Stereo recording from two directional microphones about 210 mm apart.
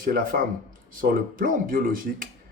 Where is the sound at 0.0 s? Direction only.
45° right (ahead or behind).